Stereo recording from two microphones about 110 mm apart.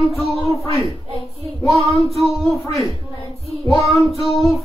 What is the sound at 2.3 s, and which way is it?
Speech, centre (ahead or behind).